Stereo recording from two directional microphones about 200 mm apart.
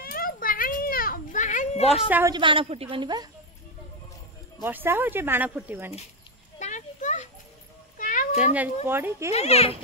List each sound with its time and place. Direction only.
0.0 s children playing: 45° left (ahead or behind)
2.0 s speech: 10° right (ahead or behind)
2.3 s a woman's voice: 25° right (ahead or behind)
4.6 s speech: 10° right (ahead or behind)
6.6 s a sound: 40° left (ahead or behind)
8.0 s cat: 40° left (ahead or behind)
8.8 s speech: 10° right (ahead or behind)
9.3 s a child's voice: 30° left (ahead or behind)